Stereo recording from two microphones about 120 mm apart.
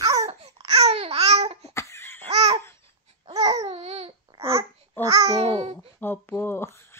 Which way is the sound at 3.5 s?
65° right (ahead or behind).